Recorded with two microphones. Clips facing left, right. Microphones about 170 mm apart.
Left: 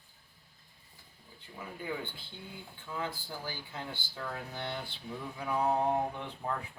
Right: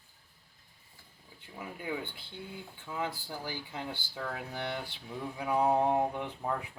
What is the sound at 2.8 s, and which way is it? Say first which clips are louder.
Speech: right 2 dB; 15° right (ahead or behind).